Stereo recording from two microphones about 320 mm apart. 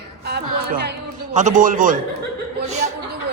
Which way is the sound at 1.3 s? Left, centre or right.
Right.